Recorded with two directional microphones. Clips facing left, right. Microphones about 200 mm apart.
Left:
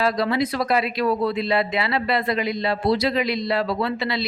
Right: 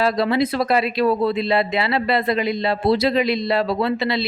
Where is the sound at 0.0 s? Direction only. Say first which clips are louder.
Right 3 dB; 25° right (ahead or behind).